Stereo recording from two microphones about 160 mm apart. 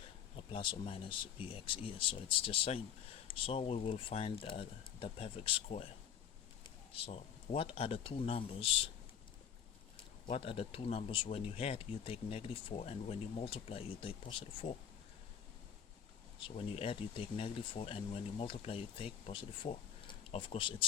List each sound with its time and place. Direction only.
0.3 s speech: 35° left (ahead or behind)
6.9 s speech: 40° left (ahead or behind)
10.3 s speech: 35° left (ahead or behind)
16.4 s speech: 40° left (ahead or behind)